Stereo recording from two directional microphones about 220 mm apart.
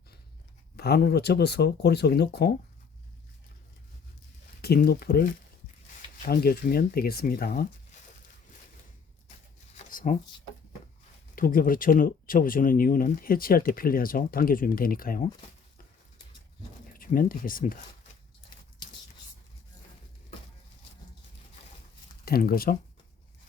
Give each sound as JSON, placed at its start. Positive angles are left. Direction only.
{"t": 0.8, "sound": "speech", "side_deg": 45}
{"t": 4.6, "sound": "speech", "side_deg": 45}
{"t": 9.7, "sound": "a sound", "side_deg": 35}
{"t": 11.3, "sound": "speech", "side_deg": 40}
{"t": 16.9, "sound": "speech", "side_deg": 40}
{"t": 22.2, "sound": "speech", "side_deg": 45}